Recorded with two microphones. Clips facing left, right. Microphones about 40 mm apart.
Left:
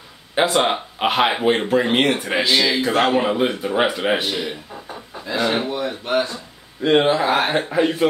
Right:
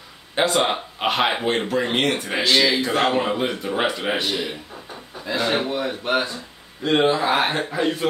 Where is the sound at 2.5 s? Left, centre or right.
Centre.